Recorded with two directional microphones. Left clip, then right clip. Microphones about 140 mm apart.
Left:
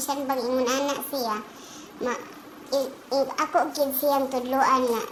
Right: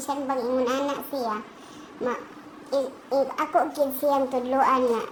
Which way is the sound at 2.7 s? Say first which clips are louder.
Right 1 dB; 10° right (ahead or behind).